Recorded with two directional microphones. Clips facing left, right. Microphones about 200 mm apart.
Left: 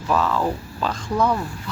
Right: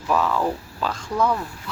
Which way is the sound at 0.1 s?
10° right (ahead or behind).